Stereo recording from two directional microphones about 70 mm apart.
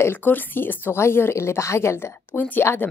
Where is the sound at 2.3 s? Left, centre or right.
Left.